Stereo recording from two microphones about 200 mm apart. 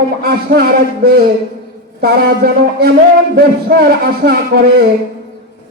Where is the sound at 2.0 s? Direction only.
50° right (ahead or behind).